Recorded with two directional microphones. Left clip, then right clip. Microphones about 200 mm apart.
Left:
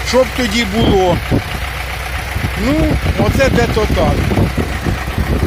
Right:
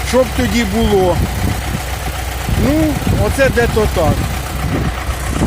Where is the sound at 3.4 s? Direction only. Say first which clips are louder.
Right 1 dB; 15° right (ahead or behind).